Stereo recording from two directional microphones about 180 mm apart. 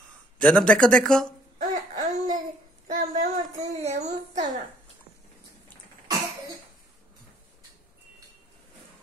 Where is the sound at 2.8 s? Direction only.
45° right (ahead or behind).